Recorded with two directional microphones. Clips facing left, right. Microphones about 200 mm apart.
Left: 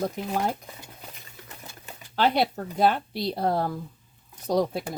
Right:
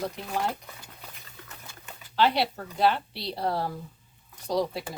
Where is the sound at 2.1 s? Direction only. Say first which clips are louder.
Left 2 dB; 50° left (ahead or behind).